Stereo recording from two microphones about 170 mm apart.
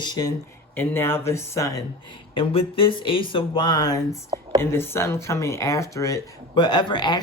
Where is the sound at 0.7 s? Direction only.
15° left (ahead or behind).